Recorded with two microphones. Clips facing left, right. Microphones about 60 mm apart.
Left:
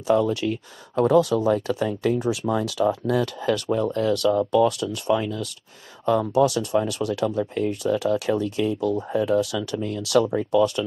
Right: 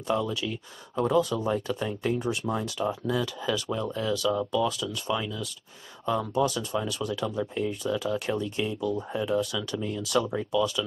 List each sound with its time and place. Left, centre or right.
0.1 s speech: left